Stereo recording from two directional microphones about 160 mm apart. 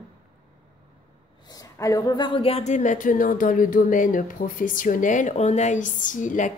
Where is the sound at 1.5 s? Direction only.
20° left (ahead or behind).